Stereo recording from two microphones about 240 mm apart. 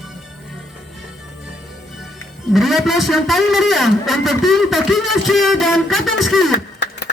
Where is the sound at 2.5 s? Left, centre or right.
Centre.